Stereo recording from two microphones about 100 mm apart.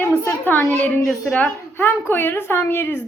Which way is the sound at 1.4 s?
20° left (ahead or behind).